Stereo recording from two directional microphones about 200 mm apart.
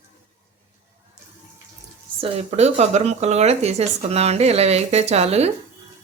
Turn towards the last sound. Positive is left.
turn(degrees=-30)  # may be behind; listen again after turning